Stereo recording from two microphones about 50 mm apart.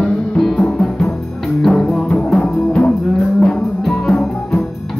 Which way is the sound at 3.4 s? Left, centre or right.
Centre.